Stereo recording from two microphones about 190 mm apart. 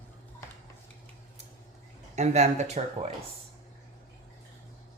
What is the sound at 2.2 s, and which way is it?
Speech, 40° right (ahead or behind).